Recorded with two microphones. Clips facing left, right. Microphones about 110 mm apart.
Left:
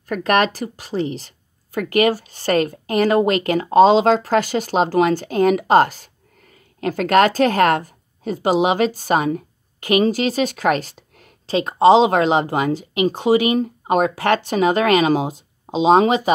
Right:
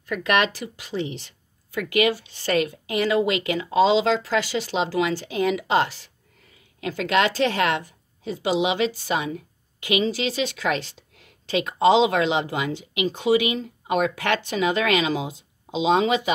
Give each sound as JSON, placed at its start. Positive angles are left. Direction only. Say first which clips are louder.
{"t": 0.1, "sound": "a woman's voice", "louder": "left 4 dB", "side_deg": 40}